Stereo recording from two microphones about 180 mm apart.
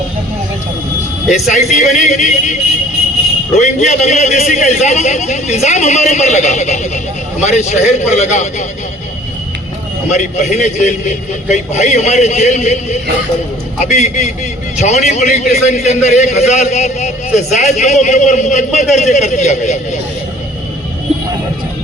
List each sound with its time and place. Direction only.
1.3 s a man's voice: 40° left (ahead or behind)
3.6 s a man's voice: 40° left (ahead or behind)
10.1 s a man's voice: 40° left (ahead or behind)